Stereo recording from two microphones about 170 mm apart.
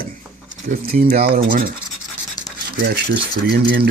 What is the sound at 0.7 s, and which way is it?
Speech, 55° right (ahead or behind).